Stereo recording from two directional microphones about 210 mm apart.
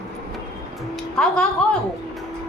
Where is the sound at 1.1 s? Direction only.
5° left (ahead or behind).